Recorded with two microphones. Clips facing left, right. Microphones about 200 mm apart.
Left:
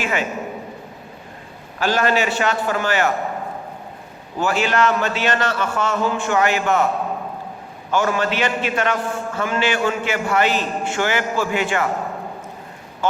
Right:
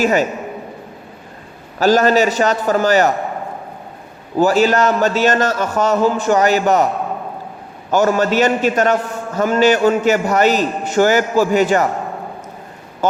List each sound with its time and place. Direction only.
0.0 s a man's voice: 40° right (ahead or behind)
1.8 s a man's voice: 40° right (ahead or behind)
4.4 s a man's voice: 40° right (ahead or behind)
7.9 s a man's voice: 40° right (ahead or behind)